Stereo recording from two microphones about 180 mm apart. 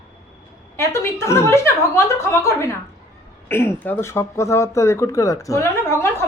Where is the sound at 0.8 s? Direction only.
15° left (ahead or behind).